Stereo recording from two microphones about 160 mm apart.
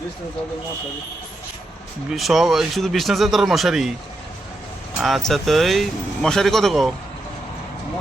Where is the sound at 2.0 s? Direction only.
Centre (ahead or behind).